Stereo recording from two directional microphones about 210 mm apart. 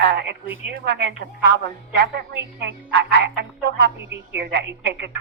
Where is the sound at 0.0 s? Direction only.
55° right (ahead or behind).